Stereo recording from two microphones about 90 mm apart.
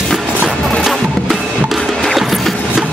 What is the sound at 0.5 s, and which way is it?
Music, centre (ahead or behind).